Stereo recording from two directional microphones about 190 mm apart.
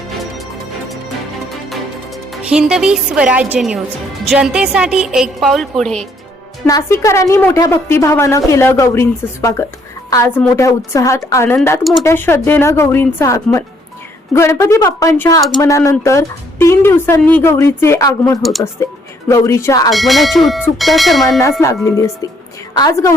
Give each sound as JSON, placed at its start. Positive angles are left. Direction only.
{"t": 2.3, "sound": "a woman's voice", "side_deg": -5}
{"t": 6.7, "sound": "a woman's voice", "side_deg": 15}
{"t": 11.8, "sound": "a woman's voice", "side_deg": 0}
{"t": 12.0, "sound": "a woman's voice", "side_deg": 10}
{"t": 19.9, "sound": "a woman's voice", "side_deg": 0}
{"t": 21.8, "sound": "a woman's voice", "side_deg": 15}